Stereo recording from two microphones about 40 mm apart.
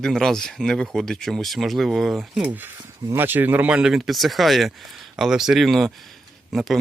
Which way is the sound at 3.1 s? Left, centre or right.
Right.